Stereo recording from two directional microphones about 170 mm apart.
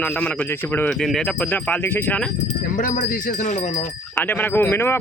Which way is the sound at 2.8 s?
50° left (ahead or behind).